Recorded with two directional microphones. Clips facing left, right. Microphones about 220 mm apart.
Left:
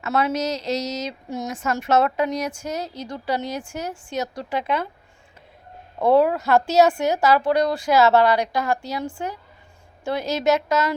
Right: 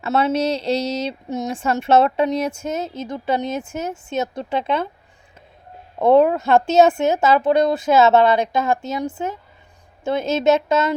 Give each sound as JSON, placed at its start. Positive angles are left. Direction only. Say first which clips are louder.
{"t": 0.0, "sound": "speech", "louder": "right 4 dB", "side_deg": -25}
{"t": 6.0, "sound": "speech", "louder": "right 3 dB", "side_deg": -20}